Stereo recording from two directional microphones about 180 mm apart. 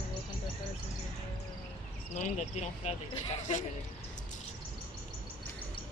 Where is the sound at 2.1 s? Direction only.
40° left (ahead or behind).